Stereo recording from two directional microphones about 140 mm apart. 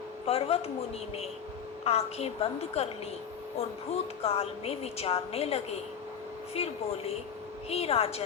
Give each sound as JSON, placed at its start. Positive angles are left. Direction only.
{"t": 0.3, "sound": "a woman's voice", "side_deg": 45}
{"t": 1.8, "sound": "a woman's voice", "side_deg": 45}